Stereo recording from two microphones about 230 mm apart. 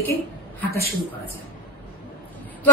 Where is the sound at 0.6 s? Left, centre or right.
Left.